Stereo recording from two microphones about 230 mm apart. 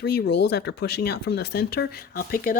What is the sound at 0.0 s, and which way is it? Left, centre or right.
Speech, left.